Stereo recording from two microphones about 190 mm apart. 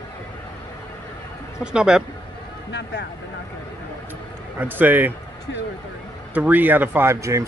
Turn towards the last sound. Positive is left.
turn(degrees=-15)  # may be behind; listen again after turning